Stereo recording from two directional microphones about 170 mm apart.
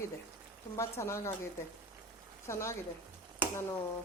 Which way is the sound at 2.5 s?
15° left (ahead or behind).